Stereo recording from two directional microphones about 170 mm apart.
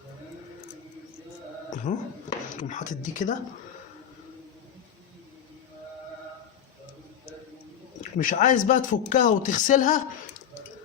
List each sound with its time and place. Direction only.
1.7 s speech: 45° left (ahead or behind)
8.2 s speech: 50° left (ahead or behind)